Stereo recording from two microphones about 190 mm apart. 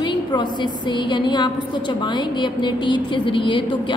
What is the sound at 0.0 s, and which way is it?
A woman's voice, 25° left (ahead or behind).